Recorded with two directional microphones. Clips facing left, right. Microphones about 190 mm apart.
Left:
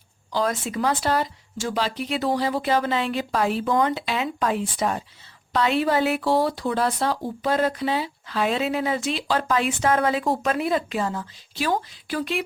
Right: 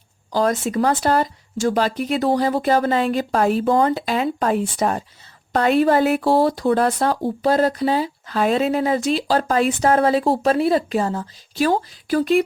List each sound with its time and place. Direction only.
0.3 s speech: 45° right (ahead or behind)